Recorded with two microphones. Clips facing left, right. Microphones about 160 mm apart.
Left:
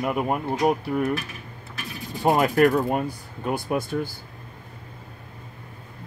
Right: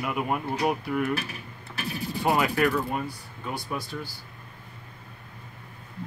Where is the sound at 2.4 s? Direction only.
40° left (ahead or behind).